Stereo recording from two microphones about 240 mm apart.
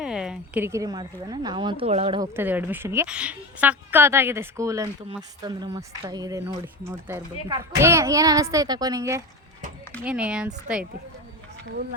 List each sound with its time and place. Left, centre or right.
0.0 s speech: centre; by 2.3 s right
2.3 s a woman's voice: centre